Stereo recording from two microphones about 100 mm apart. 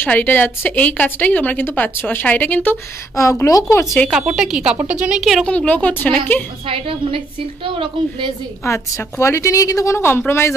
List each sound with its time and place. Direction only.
0.0 s a woman's voice: 20° left (ahead or behind)
3.2 s speech: 30° left (ahead or behind)
4.4 s a woman's voice: 5° right (ahead or behind)
5.4 s a woman's voice: 10° left (ahead or behind)
6.7 s a woman's voice: 65° right (ahead or behind)
8.6 s a woman's voice: 30° left (ahead or behind)